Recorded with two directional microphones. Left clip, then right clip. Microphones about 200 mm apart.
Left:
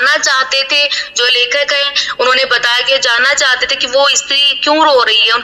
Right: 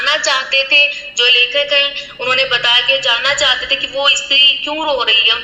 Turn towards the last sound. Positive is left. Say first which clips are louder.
# left 3 dB
turn(degrees=25)  # may be behind; listen again after turning